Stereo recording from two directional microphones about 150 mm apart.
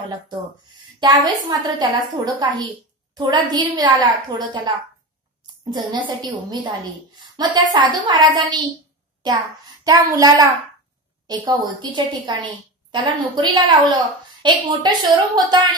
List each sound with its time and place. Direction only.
0.9 s a woman's voice: 30° right (ahead or behind)
9.8 s a woman's voice: 25° right (ahead or behind)